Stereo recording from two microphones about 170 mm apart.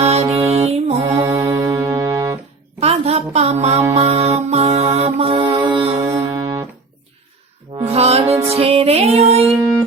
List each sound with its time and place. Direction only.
0.0 s music: 40° right (ahead or behind)
1.2 s brass instrument: 20° right (ahead or behind)
2.8 s music: 40° right (ahead or behind)
6.3 s music: 20° right (ahead or behind)
7.8 s music: 35° right (ahead or behind)